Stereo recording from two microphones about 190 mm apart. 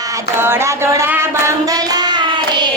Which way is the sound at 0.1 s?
10° right (ahead or behind).